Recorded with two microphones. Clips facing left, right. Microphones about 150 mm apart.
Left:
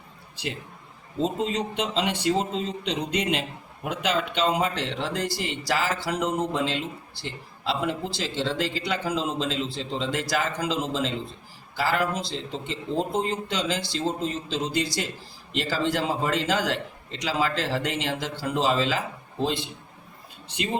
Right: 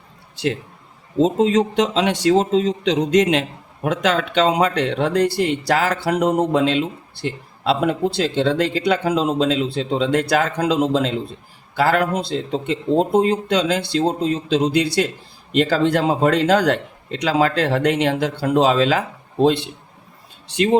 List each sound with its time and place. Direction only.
1.2 s speech: 90° right; by 19.7 s 65° right (ahead or behind)